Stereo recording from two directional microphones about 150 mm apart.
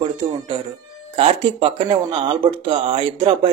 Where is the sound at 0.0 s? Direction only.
35° right (ahead or behind).